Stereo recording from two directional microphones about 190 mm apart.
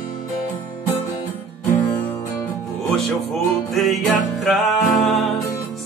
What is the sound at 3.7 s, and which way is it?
Music, centre (ahead or behind).